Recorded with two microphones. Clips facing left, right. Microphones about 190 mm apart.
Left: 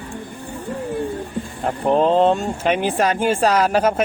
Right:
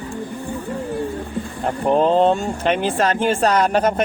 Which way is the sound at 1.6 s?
Centre (ahead or behind).